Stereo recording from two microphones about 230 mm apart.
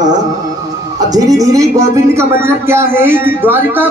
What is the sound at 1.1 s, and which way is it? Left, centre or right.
A man's voice, centre.